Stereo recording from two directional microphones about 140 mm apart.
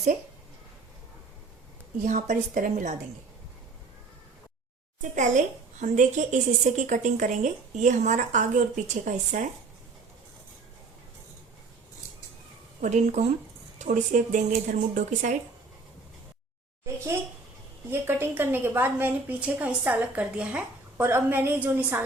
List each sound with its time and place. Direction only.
2.0 s a woman's voice: 60° right (ahead or behind)
5.1 s a woman's voice: 60° right (ahead or behind)
12.8 s a woman's voice: 60° right (ahead or behind)
13.7 s a woman's voice: 65° right (ahead or behind)
17.9 s a woman's voice: 15° right (ahead or behind)